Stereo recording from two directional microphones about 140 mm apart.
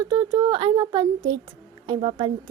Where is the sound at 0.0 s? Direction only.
30° right (ahead or behind).